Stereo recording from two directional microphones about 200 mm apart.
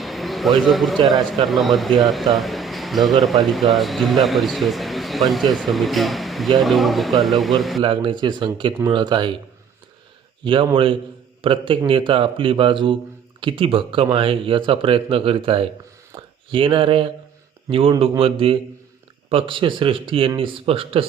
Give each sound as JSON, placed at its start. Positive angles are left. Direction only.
{"t": 0.0, "sound": "a sound", "side_deg": 0}
{"t": 1.5, "sound": "a man's voice", "side_deg": 0}
{"t": 7.8, "sound": "speech", "side_deg": -25}
{"t": 10.4, "sound": "speech", "side_deg": -25}